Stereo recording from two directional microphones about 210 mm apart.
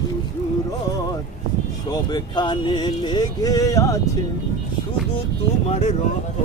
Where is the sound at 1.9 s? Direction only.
20° left (ahead or behind).